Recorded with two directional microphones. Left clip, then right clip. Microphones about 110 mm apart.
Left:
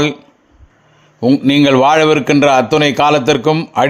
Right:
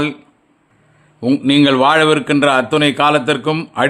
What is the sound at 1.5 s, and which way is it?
A man's voice, 40° left (ahead or behind).